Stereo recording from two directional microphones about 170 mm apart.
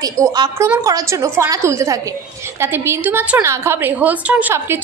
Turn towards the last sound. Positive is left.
turn(degrees=-10)  # may be behind; listen again after turning